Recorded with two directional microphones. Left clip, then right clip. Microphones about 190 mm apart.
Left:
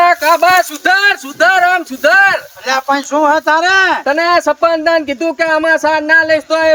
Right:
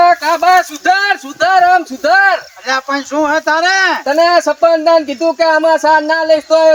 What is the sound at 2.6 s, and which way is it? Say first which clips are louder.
Speech: left 4 dB; 35° left (ahead or behind).